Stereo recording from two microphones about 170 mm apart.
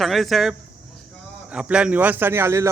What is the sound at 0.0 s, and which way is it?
Speech, centre (ahead or behind).